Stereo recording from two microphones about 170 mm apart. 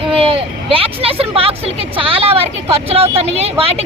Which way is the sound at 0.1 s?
35° right (ahead or behind).